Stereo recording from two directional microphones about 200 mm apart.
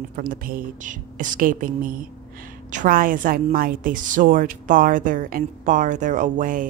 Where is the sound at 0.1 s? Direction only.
45° right (ahead or behind).